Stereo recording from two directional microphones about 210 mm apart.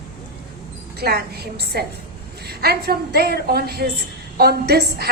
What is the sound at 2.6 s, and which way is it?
A woman's voice, 50° right (ahead or behind).